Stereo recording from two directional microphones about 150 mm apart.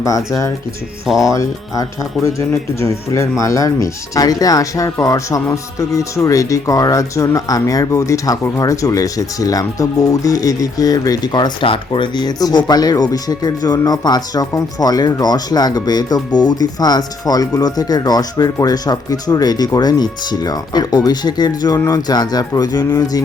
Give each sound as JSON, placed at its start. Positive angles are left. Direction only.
{"t": 1.2, "sound": "speech", "side_deg": 20}